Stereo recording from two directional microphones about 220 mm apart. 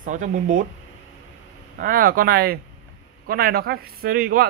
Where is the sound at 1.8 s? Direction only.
40° right (ahead or behind).